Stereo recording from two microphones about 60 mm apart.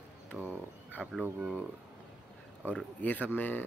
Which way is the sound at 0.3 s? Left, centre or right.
Centre.